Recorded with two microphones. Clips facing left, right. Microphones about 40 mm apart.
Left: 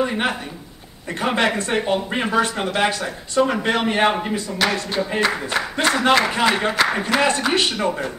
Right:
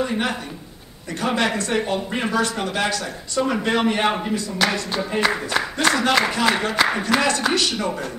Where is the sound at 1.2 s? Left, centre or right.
Left.